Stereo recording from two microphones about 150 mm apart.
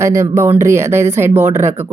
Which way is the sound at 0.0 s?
20° right (ahead or behind).